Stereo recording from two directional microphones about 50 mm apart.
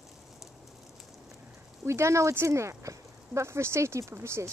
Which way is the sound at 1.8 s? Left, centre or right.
Right.